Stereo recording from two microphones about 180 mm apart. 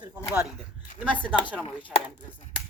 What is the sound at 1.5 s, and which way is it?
Speech, 10° left (ahead or behind).